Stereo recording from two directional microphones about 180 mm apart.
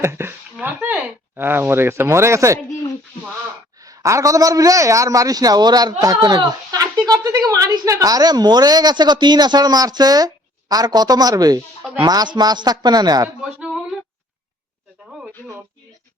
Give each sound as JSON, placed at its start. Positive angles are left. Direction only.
{"t": 0.0, "sound": "speech", "side_deg": -15}
{"t": 3.8, "sound": "speech", "side_deg": -20}